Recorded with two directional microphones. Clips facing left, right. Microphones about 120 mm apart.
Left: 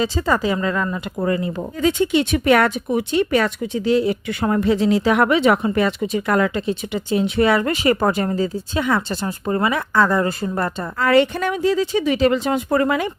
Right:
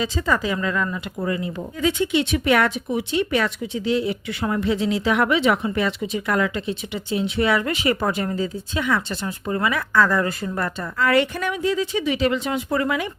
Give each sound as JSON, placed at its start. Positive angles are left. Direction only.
{"t": 0.0, "sound": "speech", "side_deg": 35}